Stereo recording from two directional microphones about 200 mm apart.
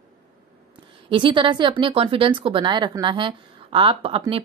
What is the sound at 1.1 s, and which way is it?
Speech, 25° right (ahead or behind).